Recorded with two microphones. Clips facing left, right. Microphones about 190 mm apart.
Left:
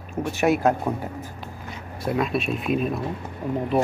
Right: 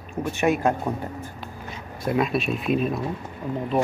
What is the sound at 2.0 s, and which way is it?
Speech, centre (ahead or behind).